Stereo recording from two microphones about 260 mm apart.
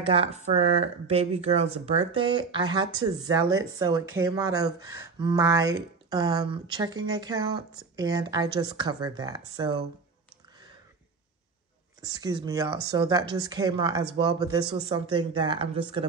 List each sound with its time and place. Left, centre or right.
0.0 s speech: right
12.0 s speech: centre